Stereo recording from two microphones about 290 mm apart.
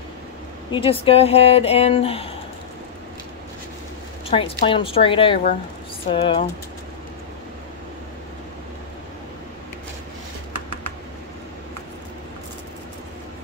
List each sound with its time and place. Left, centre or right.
0.7 s speech: centre
4.3 s a woman's voice: centre